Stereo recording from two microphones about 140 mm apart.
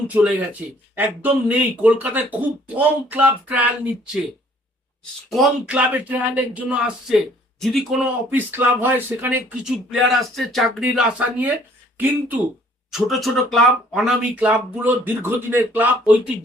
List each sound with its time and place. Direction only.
0.1 s speech: 10° right (ahead or behind)
5.3 s speech: 5° right (ahead or behind)
8.3 s speech: 15° right (ahead or behind)
12.9 s speech: centre (ahead or behind)